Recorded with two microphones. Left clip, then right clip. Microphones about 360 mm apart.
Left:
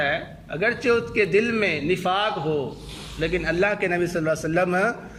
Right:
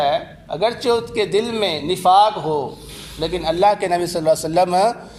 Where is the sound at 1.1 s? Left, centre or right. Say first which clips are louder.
Right 1 dB; right.